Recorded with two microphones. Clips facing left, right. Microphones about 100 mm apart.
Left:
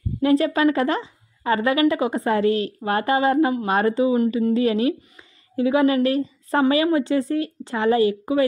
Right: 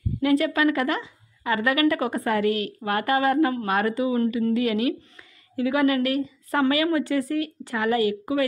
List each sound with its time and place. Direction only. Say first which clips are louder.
0.2 s a woman's voice: left 3 dB; 30° left (ahead or behind)